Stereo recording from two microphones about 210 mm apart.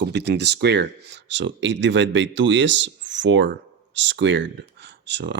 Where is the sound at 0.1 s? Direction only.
55° right (ahead or behind).